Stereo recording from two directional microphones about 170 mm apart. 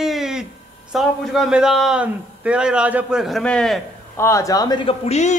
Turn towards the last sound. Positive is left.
turn(degrees=40)  # may be behind; listen again after turning